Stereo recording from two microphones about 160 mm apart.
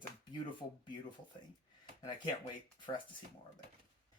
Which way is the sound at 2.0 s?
30° left (ahead or behind).